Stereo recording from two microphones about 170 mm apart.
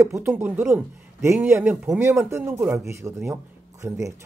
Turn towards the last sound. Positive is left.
turn(degrees=-20)  # may be behind; listen again after turning